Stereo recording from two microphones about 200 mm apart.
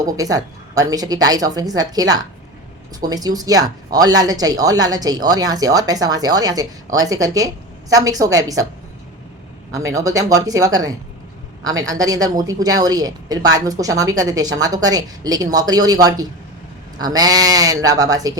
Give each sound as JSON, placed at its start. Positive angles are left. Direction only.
{"t": 0.0, "sound": "a woman's voice", "side_deg": -15}
{"t": 9.7, "sound": "a woman's voice", "side_deg": -15}